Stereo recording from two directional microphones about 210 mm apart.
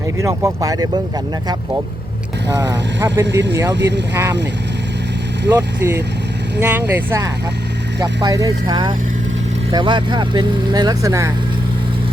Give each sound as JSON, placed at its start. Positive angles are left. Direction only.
{"t": 0.2, "sound": "speech", "side_deg": -15}
{"t": 2.5, "sound": "speech", "side_deg": -15}
{"t": 3.8, "sound": "speech", "side_deg": -55}
{"t": 4.1, "sound": "speech", "side_deg": -15}
{"t": 5.5, "sound": "speech", "side_deg": -10}